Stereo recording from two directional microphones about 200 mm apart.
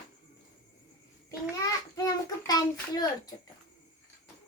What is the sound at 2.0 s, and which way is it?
Child singing, 20° left (ahead or behind).